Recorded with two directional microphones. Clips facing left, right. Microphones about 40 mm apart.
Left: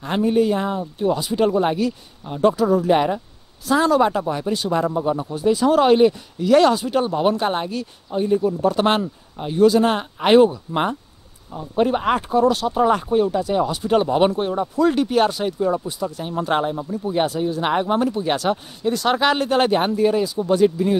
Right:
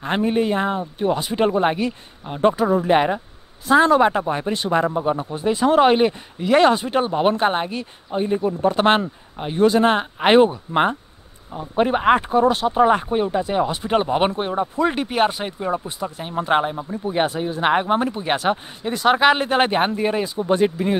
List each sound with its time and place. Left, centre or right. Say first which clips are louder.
0.0 s speech: left 2 dB; right